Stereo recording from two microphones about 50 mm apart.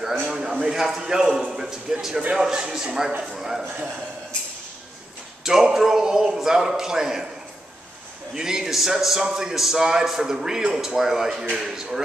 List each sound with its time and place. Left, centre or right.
0.3 s a man's voice: centre
3.1 s a man's voice: right
3.3 s a man's voice: centre
5.4 s a man's voice: centre
8.4 s a man's voice: centre